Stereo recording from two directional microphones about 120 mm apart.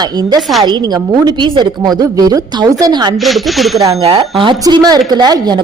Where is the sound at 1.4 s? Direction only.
35° right (ahead or behind).